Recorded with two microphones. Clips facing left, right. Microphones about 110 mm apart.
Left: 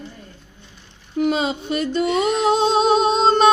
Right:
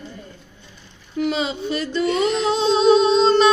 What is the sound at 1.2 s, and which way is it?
Music, 45° left (ahead or behind).